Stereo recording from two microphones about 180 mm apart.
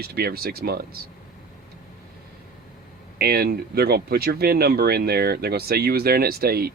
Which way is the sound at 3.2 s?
60° right (ahead or behind).